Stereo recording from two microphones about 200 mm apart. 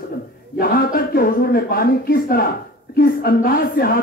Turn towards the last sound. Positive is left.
turn(degrees=50)  # may be behind; listen again after turning